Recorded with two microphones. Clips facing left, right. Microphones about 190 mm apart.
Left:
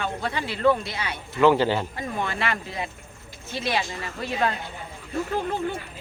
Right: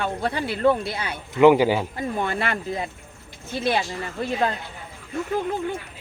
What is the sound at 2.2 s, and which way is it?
Speech, 45° right (ahead or behind).